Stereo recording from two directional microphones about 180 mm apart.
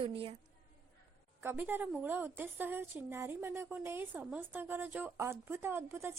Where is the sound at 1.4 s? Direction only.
10° right (ahead or behind).